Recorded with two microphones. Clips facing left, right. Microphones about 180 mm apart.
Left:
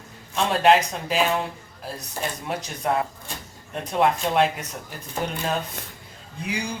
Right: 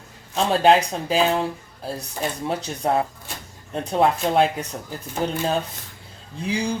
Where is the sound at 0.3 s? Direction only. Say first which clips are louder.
Right 2 dB; 30° right (ahead or behind).